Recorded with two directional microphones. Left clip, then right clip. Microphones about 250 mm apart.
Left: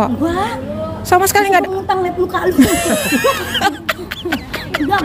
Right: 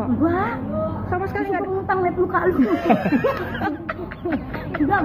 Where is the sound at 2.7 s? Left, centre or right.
Left.